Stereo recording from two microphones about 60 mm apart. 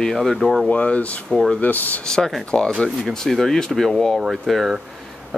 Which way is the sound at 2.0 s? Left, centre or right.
Centre.